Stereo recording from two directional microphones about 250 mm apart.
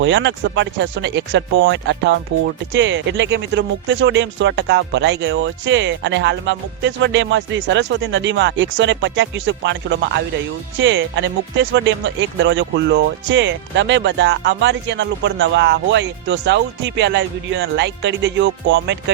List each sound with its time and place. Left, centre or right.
0.0 s speech: right